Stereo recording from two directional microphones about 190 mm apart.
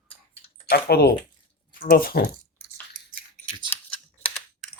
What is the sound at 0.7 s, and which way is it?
Speech, 55° left (ahead or behind).